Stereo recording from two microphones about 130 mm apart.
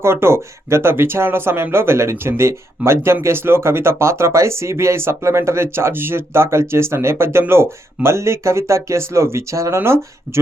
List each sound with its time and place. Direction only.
0.0 s speech: 20° right (ahead or behind)